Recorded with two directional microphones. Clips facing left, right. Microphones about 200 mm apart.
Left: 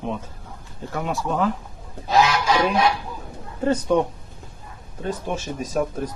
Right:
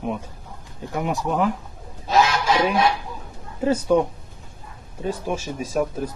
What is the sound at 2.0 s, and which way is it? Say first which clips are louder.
Goose: even; 25° right (ahead or behind).